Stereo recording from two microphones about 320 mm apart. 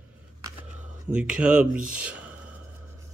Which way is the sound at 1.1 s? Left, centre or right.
Centre.